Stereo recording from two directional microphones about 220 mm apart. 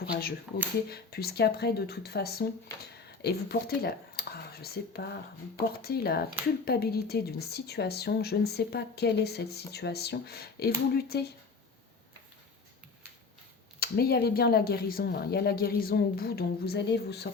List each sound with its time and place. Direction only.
0.0 s speech: 45° left (ahead or behind)
13.7 s speech: 45° left (ahead or behind)